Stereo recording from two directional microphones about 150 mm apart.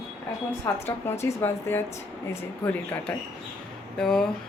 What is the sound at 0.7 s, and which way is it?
A woman's voice, 15° left (ahead or behind).